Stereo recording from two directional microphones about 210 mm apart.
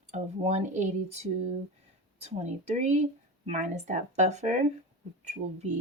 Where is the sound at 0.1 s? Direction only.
35° right (ahead or behind).